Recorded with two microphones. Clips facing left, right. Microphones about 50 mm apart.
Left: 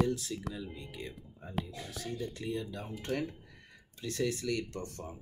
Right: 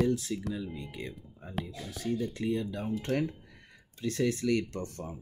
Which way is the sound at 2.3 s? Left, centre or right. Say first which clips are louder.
Right 5 dB; right.